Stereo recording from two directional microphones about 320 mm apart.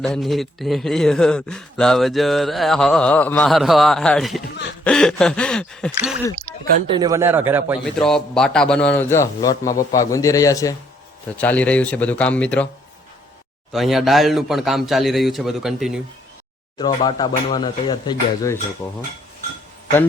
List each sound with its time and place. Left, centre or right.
0.0 s a man's voice: centre
6.8 s a man's voice: centre
13.7 s a man's voice: centre
16.7 s speech: centre